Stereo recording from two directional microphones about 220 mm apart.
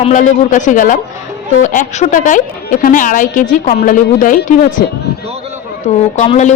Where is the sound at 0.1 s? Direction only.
35° left (ahead or behind).